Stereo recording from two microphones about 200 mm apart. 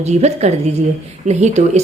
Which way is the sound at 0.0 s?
35° right (ahead or behind).